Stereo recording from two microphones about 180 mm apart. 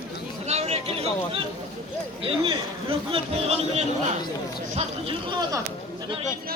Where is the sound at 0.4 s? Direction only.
35° right (ahead or behind).